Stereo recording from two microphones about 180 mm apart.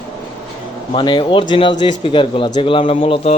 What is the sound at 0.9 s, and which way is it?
A man's voice, 25° left (ahead or behind).